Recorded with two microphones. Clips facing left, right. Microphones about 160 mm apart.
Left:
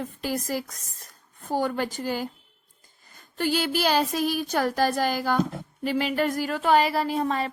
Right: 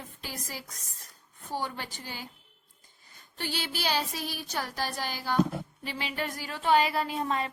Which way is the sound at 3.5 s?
50° left (ahead or behind).